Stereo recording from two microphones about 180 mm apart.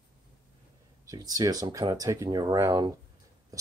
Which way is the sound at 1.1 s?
20° right (ahead or behind).